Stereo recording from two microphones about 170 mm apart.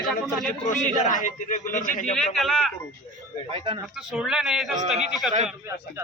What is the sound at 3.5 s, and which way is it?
Speech, 30° right (ahead or behind).